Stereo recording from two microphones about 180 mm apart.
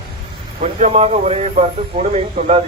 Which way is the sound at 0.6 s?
35° right (ahead or behind).